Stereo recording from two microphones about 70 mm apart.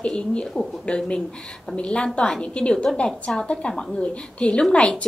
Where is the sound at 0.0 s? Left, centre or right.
Centre.